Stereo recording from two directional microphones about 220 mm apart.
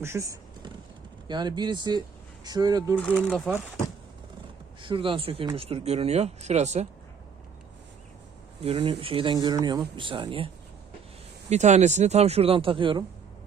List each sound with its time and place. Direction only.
0.0 s a sound: 15° right (ahead or behind)
1.3 s speech: 20° right (ahead or behind)
2.9 s speech: 5° left (ahead or behind)
4.8 s speech: 20° right (ahead or behind)
8.6 s speech: 25° right (ahead or behind)